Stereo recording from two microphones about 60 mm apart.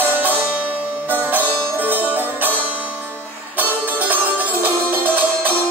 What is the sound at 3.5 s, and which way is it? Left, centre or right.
Music, right.